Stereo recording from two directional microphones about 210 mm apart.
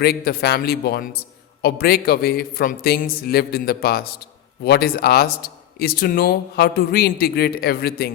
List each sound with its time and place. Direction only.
0.0 s a man's voice: 50° left (ahead or behind)